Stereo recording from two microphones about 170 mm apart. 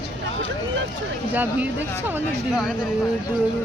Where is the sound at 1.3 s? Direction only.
10° right (ahead or behind).